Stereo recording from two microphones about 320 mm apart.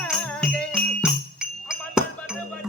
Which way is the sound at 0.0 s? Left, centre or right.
Centre.